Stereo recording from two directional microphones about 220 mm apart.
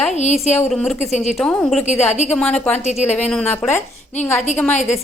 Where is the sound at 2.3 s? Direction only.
5° left (ahead or behind).